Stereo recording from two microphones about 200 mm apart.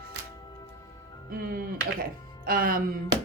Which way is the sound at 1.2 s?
45° right (ahead or behind).